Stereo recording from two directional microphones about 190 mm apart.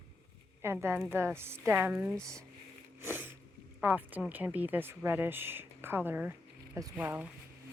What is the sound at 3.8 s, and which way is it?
Speech, 10° right (ahead or behind).